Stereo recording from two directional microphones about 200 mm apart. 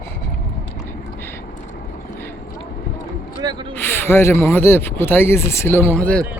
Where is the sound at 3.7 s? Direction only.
10° left (ahead or behind).